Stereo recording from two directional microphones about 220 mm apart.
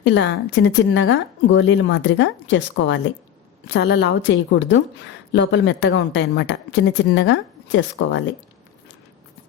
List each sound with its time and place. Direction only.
0.0 s a woman's voice: 50° left (ahead or behind)